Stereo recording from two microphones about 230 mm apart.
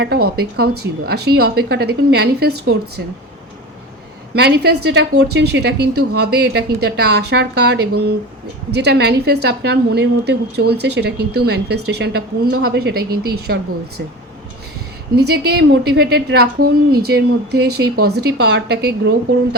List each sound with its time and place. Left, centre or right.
0.3 s a woman's voice: right
4.4 s a woman's voice: right
15.1 s a woman's voice: right